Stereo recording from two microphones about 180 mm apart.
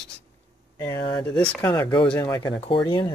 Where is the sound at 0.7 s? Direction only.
15° left (ahead or behind).